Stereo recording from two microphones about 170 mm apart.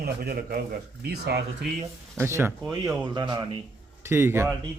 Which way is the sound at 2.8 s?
25° right (ahead or behind).